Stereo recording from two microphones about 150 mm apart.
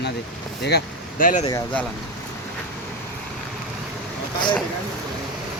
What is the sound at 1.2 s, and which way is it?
Speech, 60° left (ahead or behind).